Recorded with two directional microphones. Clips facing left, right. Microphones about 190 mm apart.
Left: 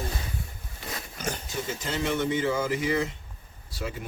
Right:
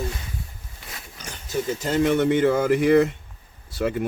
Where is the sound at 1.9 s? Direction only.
50° right (ahead or behind).